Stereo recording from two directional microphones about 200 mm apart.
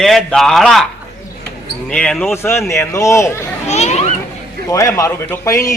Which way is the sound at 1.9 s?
5° left (ahead or behind).